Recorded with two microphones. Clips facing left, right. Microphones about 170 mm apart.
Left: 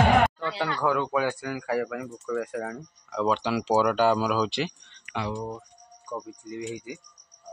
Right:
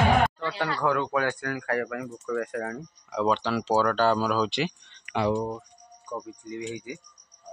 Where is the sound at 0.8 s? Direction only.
5° left (ahead or behind).